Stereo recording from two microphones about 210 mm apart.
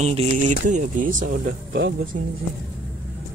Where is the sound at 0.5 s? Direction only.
35° right (ahead or behind).